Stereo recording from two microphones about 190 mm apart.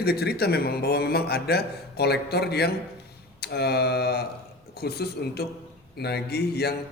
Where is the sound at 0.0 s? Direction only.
55° left (ahead or behind).